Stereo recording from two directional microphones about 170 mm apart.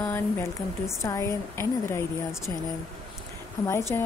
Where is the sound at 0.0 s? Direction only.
15° left (ahead or behind).